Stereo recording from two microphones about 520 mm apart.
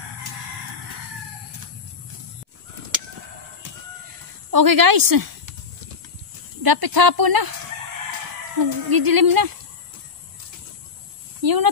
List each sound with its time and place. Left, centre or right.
4.5 s speech: right
6.6 s speech: right
8.6 s speech: right
11.4 s speech: right